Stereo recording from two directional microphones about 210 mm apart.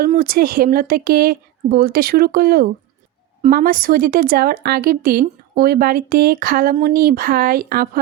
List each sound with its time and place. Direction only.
0.0 s speech: 40° right (ahead or behind)